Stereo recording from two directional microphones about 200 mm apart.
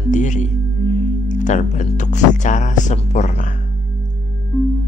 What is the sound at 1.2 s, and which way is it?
Speech, 40° left (ahead or behind).